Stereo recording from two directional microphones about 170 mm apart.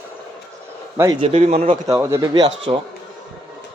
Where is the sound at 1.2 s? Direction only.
40° right (ahead or behind).